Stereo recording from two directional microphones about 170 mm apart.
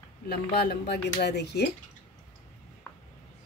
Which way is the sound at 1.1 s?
80° left.